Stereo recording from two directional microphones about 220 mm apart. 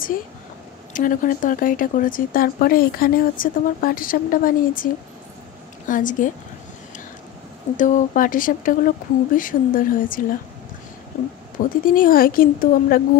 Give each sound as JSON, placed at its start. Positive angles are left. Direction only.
{"t": 0.9, "sound": "speech", "side_deg": 40}
{"t": 5.9, "sound": "speech", "side_deg": 35}
{"t": 7.7, "sound": "speech", "side_deg": 35}
{"t": 11.8, "sound": "speech", "side_deg": 40}